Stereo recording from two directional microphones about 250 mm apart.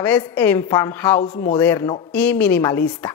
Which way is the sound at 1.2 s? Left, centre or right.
Left.